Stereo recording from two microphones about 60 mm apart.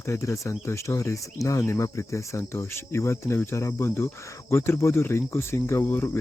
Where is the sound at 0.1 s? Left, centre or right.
Left.